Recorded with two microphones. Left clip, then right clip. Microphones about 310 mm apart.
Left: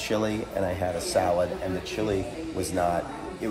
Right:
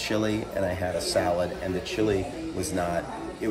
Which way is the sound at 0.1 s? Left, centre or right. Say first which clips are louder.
Left 1 dB; centre.